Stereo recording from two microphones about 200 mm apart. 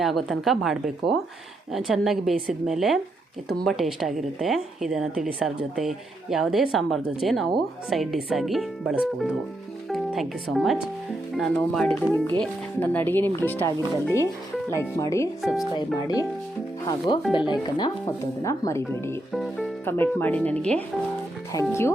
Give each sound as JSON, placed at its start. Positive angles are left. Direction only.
{"t": 0.0, "sound": "a woman's voice", "side_deg": 0}
{"t": 15.4, "sound": "a woman's voice", "side_deg": 0}
{"t": 17.1, "sound": "speech", "side_deg": 20}
{"t": 19.3, "sound": "a woman's voice", "side_deg": 0}
{"t": 19.8, "sound": "speech", "side_deg": 10}